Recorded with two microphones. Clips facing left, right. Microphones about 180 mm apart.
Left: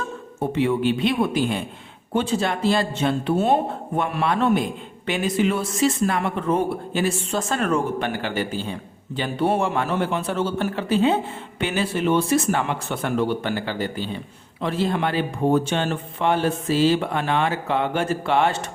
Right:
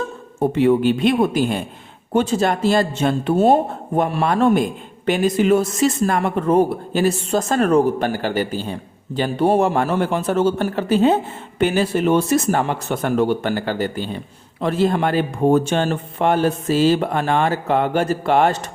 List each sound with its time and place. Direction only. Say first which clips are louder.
0.3 s speech: right 6 dB; 45° right (ahead or behind)